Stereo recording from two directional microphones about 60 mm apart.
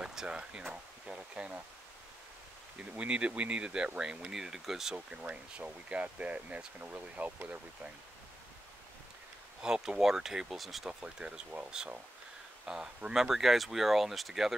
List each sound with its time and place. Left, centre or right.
0.0 s speech: centre
2.8 s speech: centre
4.9 s speech: right
9.6 s speech: centre
10.9 s speech: centre
12.6 s speech: centre